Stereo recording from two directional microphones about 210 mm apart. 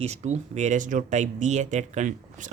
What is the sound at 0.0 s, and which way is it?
Speech, 30° right (ahead or behind).